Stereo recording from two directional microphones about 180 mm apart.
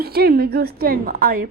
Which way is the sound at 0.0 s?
60° right (ahead or behind).